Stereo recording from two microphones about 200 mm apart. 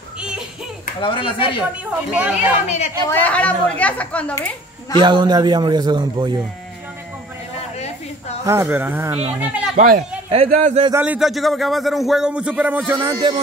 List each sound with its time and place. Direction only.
1.0 s speech: 25° left (ahead or behind)
2.1 s speech: 5° right (ahead or behind)
3.1 s speech: 10° left (ahead or behind)
4.9 s a man's voice: 25° right (ahead or behind)
8.5 s speech: 10° right (ahead or behind)
9.8 s speech: 35° right (ahead or behind)
10.9 s a man's voice: 10° right (ahead or behind)